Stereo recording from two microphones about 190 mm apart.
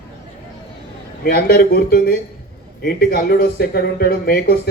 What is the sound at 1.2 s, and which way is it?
Speech, 55° left (ahead or behind).